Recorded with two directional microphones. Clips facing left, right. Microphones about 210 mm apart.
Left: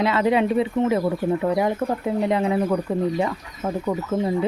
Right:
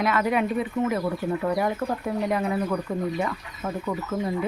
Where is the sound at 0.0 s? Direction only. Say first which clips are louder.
Left 4 dB; 25° left (ahead or behind).